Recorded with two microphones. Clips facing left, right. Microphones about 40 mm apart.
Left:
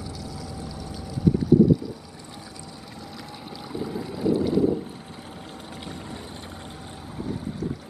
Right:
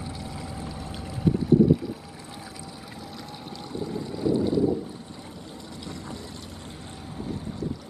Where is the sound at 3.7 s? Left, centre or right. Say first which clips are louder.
Left 1 dB; centre.